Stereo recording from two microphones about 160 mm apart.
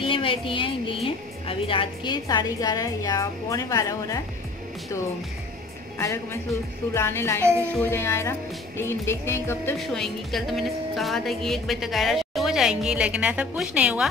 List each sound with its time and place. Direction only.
0.0 s a sound: 35° left (ahead or behind)
1.0 s a woman's voice: 35° left (ahead or behind)
5.9 s speech: 15° left (ahead or behind)
9.8 s a woman's voice: centre (ahead or behind)